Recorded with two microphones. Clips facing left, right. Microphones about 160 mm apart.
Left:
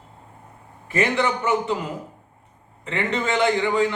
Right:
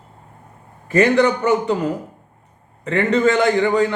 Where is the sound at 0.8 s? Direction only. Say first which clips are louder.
Right 7 dB; 45° right (ahead or behind).